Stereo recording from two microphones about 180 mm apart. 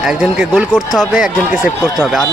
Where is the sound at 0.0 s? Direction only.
5° right (ahead or behind).